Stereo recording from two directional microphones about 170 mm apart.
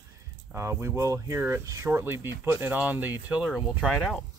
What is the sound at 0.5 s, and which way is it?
Speech, 15° right (ahead or behind).